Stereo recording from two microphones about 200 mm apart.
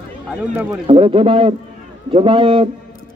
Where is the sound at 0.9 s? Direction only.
25° right (ahead or behind).